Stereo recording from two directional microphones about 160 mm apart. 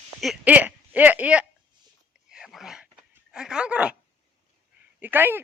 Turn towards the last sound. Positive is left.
turn(degrees=-10)  # may be behind; listen again after turning